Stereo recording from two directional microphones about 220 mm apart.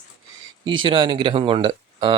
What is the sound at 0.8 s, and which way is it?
Speech, 20° right (ahead or behind).